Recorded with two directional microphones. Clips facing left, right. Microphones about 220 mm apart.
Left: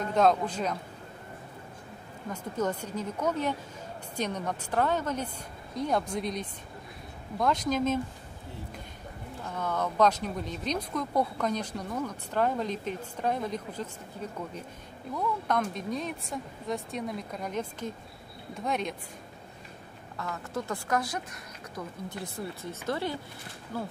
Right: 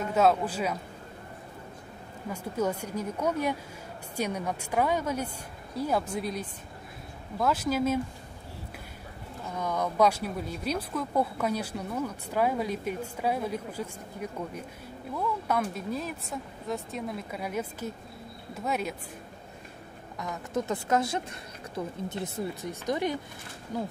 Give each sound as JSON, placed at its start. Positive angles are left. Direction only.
{"t": 0.0, "sound": "speech", "side_deg": -5}
{"t": 2.2, "sound": "speech", "side_deg": -10}
{"t": 9.6, "sound": "speech", "side_deg": -10}
{"t": 20.2, "sound": "a woman's voice", "side_deg": -20}